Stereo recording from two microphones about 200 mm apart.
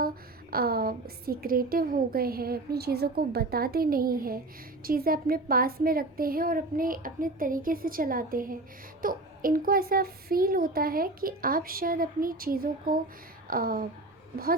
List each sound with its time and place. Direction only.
0.5 s a child's voice: 50° right (ahead or behind)